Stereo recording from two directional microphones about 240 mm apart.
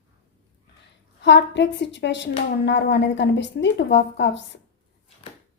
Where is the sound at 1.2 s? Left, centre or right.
Left.